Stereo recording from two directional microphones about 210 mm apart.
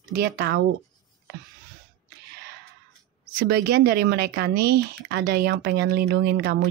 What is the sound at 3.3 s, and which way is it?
Speech, 50° right (ahead or behind).